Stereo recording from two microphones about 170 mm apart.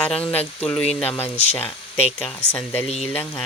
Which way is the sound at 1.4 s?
35° left (ahead or behind).